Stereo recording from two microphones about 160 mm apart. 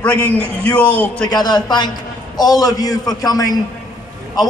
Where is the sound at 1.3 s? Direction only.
25° left (ahead or behind).